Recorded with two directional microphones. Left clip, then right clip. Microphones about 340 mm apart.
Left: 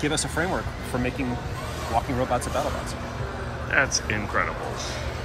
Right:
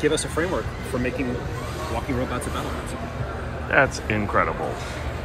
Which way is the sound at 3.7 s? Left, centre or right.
Centre.